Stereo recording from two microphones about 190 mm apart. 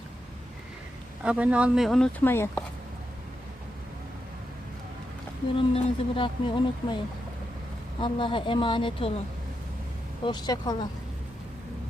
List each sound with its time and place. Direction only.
1.2 s speech: 5° right (ahead or behind); by 2.6 s 10° left (ahead or behind)
5.5 s speech: 30° left (ahead or behind)
10.2 s speech: 20° left (ahead or behind)